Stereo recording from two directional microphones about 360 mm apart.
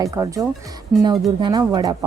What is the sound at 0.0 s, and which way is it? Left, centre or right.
Speech, centre.